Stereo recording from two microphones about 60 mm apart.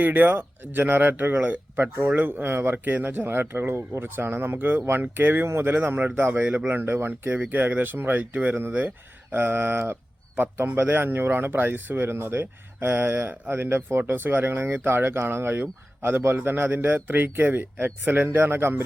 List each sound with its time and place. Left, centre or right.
0.0 s speech: right
3.7 s speech: right